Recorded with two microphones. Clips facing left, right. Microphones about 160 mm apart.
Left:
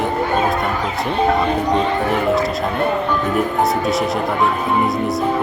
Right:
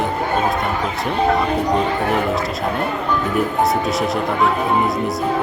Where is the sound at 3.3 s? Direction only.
Centre (ahead or behind).